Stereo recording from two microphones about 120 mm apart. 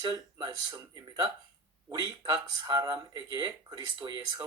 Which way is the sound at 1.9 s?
40° right (ahead or behind).